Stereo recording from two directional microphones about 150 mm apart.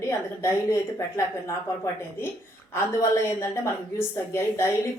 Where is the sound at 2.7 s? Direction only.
20° left (ahead or behind).